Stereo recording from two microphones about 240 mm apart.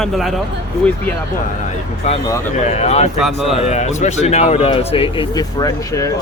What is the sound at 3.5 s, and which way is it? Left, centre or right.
Speech, left.